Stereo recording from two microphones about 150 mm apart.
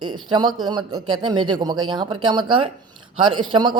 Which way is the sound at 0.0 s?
30° right (ahead or behind).